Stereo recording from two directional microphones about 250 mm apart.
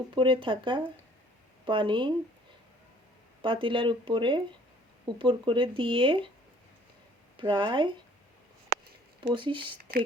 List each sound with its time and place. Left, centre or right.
0.1 s speech: centre
3.4 s speech: centre
7.3 s speech: centre
9.2 s speech: centre